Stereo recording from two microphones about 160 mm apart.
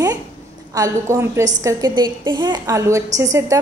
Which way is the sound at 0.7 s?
20° right (ahead or behind).